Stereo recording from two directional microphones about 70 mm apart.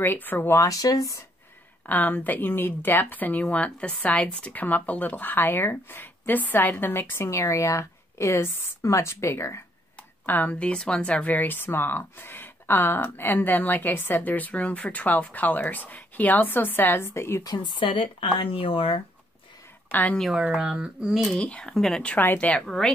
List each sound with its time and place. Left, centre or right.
0.0 s speech: left
0.6 s speech: left
1.9 s speech: left
10.2 s speech: left
17.4 s speech: left
19.9 s speech: left
20.3 s speech: centre
21.4 s speech: centre
22.0 s speech: left
22.6 s speech: centre